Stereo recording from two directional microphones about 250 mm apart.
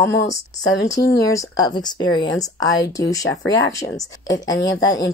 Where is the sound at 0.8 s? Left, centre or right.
Centre.